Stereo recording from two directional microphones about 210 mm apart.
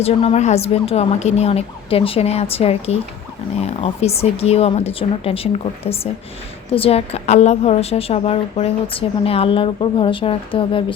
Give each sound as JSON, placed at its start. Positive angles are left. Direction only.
{"t": 0.0, "sound": "a woman's voice", "side_deg": 30}